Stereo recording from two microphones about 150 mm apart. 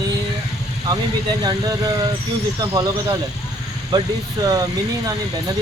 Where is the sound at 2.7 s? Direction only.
25° right (ahead or behind).